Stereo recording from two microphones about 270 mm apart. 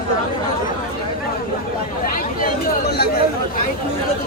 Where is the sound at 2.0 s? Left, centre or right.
Left.